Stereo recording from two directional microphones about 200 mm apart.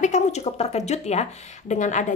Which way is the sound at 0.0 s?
35° left (ahead or behind).